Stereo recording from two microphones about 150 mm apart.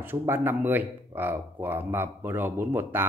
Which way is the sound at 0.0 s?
15° right (ahead or behind).